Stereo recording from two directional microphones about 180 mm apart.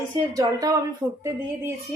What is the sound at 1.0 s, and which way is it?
Speech, 10° right (ahead or behind).